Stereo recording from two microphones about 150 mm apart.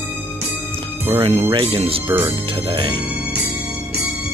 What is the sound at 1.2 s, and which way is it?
Speech, 40° right (ahead or behind).